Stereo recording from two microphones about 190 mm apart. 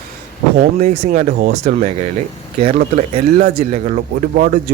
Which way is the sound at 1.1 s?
45° right (ahead or behind).